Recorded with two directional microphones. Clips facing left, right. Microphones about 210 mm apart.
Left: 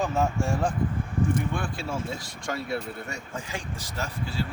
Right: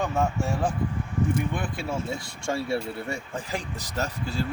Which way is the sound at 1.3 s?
20° right (ahead or behind).